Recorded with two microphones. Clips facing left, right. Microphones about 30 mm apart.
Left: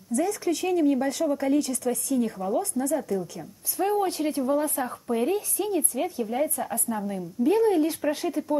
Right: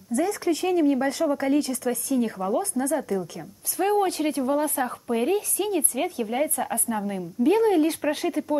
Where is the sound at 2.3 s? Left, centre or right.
Right.